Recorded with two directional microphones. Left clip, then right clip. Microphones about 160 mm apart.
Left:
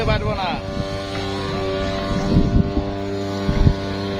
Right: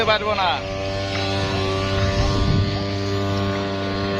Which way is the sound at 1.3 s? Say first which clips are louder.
Right 1 dB; 40° right (ahead or behind).